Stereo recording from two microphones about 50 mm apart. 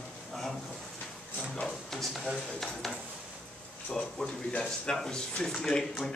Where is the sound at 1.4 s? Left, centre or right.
Centre.